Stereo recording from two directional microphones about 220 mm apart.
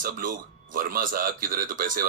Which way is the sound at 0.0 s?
40° right (ahead or behind).